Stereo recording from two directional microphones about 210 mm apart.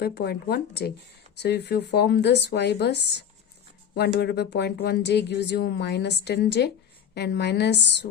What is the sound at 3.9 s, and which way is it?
A woman's voice, 50° left (ahead or behind).